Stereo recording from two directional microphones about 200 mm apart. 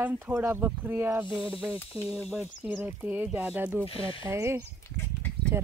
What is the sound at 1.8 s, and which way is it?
Speech, 10° left (ahead or behind).